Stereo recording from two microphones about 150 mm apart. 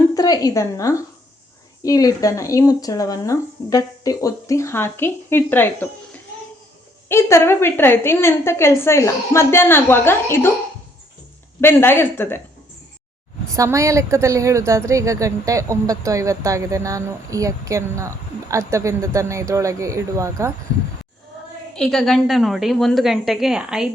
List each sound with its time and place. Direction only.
0.1 s a woman's voice: 25° left (ahead or behind)
7.1 s a woman's voice: 20° left (ahead or behind)
11.6 s a woman's voice: 15° left (ahead or behind)
13.6 s a woman's voice: 20° right (ahead or behind)
21.8 s a woman's voice: centre (ahead or behind)